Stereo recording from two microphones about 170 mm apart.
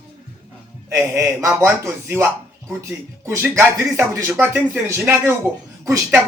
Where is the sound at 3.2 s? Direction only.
15° right (ahead or behind).